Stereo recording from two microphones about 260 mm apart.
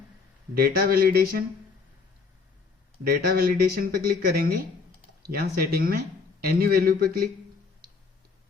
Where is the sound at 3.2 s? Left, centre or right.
Right.